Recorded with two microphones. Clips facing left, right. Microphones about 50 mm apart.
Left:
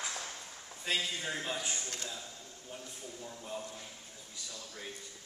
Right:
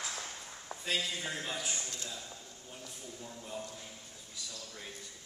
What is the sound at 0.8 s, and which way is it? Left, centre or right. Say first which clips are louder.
A man's voice: left 1 dB; centre.